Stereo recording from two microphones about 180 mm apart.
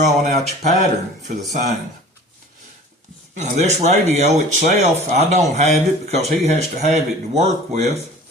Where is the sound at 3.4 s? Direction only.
40° right (ahead or behind).